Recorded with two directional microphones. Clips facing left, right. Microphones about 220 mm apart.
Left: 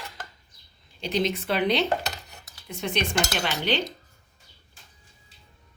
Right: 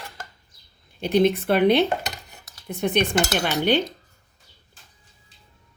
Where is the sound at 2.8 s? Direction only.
55° right (ahead or behind).